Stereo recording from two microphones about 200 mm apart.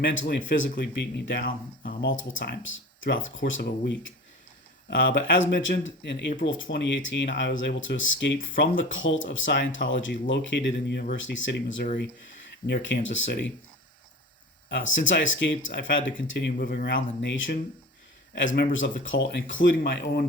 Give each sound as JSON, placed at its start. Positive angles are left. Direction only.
{"t": 0.0, "sound": "speech", "side_deg": 65}
{"t": 2.0, "sound": "speech", "side_deg": 70}
{"t": 14.7, "sound": "speech", "side_deg": 65}